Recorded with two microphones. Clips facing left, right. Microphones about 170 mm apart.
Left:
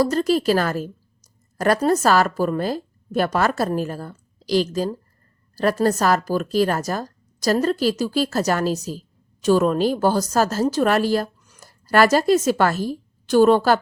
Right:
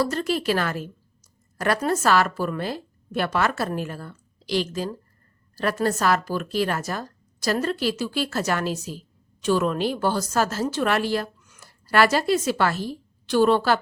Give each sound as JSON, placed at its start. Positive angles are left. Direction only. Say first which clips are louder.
{"t": 0.0, "sound": "a woman's voice", "louder": "left 5 dB", "side_deg": 40}